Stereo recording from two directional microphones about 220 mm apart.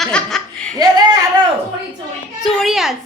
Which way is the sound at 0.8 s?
20° right (ahead or behind).